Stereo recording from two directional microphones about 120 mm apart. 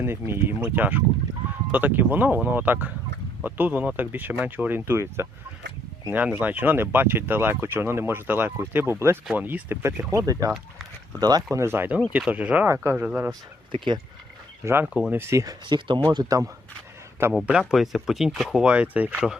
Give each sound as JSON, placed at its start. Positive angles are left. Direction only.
{"t": 0.0, "sound": "speech", "side_deg": -20}
{"t": 11.5, "sound": "speech", "side_deg": -20}
{"t": 13.7, "sound": "speech", "side_deg": -45}
{"t": 14.6, "sound": "speech", "side_deg": -20}
{"t": 15.6, "sound": "speech", "side_deg": -40}
{"t": 17.4, "sound": "speech", "side_deg": -5}